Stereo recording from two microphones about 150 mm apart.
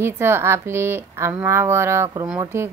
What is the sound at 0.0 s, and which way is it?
Speech, 15° right (ahead or behind).